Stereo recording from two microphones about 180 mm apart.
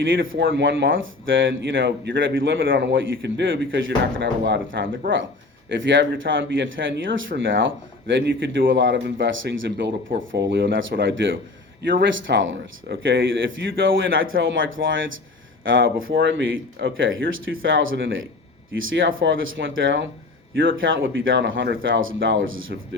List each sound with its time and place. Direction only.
0.0 s speech: 90° right
9.2 s speech: 70° right (ahead or behind)
10.5 s speech: 85° right